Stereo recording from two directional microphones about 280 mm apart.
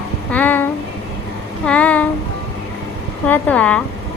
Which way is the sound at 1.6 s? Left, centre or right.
Centre.